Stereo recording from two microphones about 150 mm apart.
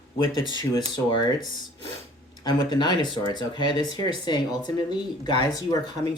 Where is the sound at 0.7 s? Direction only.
30° left (ahead or behind).